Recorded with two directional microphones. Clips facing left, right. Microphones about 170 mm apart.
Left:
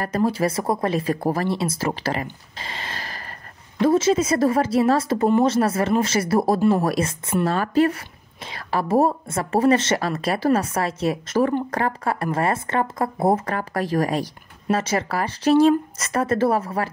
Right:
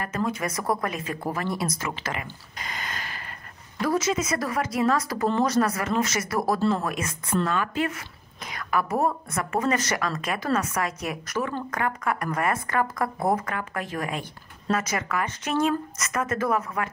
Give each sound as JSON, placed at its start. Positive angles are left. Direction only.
{"t": 0.0, "sound": "speech", "side_deg": 35}
{"t": 2.6, "sound": "dog", "side_deg": 30}
{"t": 3.8, "sound": "speech", "side_deg": 25}